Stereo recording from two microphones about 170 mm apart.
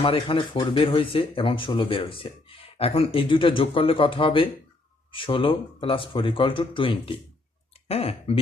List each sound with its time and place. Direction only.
0.0 s speech: 30° left (ahead or behind)